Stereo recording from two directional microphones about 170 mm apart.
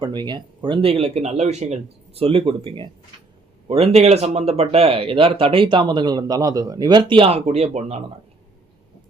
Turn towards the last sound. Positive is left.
turn(degrees=-40)  # may be behind; listen again after turning